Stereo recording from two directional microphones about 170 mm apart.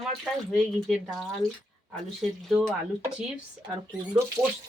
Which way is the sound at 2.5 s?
Centre (ahead or behind).